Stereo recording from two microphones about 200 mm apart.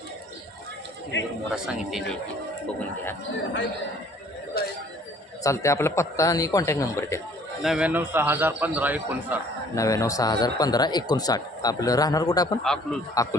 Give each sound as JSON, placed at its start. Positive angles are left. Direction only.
{"t": 1.1, "sound": "a man's voice", "side_deg": 60}
{"t": 1.5, "sound": "a man's voice", "side_deg": 0}
{"t": 4.6, "sound": "a sound", "side_deg": 50}
{"t": 5.4, "sound": "a man's voice", "side_deg": 15}
{"t": 7.6, "sound": "a man's voice", "side_deg": -5}
{"t": 9.7, "sound": "speech", "side_deg": 15}
{"t": 12.6, "sound": "a man's voice", "side_deg": 0}